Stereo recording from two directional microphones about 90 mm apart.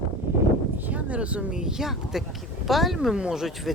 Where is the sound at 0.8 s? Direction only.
15° right (ahead or behind).